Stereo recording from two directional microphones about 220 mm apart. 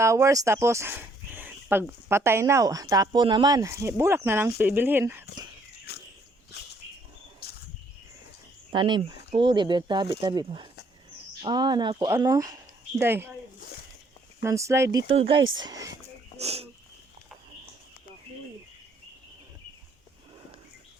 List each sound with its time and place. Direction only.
0.0 s speech: 15° right (ahead or behind)
5.9 s walk: 45° left (ahead or behind)
7.4 s a sound: 45° left (ahead or behind)
8.7 s speech: 20° right (ahead or behind)
14.4 s speech: 15° right (ahead or behind)
15.0 s speech: 25° right (ahead or behind)
15.4 s speech: 60° right (ahead or behind)
15.6 s speech: 15° right (ahead or behind)
16.4 s speech: 30° right (ahead or behind)